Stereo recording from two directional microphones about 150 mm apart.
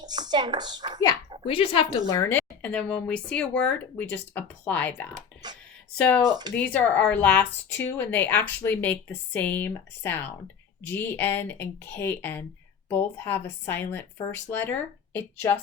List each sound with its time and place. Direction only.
0.0 s speech: 30° right (ahead or behind)
1.5 s speech: 35° left (ahead or behind)
2.1 s speech: 20° left (ahead or behind)
5.4 s speech: 30° right (ahead or behind)
6.0 s speech: 10° left (ahead or behind)